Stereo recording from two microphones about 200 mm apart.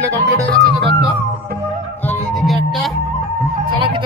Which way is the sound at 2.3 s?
Centre (ahead or behind).